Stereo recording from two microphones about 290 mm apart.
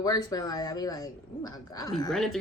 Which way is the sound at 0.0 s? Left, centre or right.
Centre.